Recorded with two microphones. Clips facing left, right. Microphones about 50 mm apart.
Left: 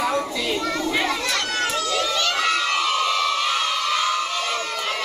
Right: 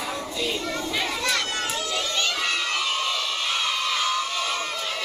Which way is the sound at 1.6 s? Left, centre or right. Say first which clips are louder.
Left 5 dB; left.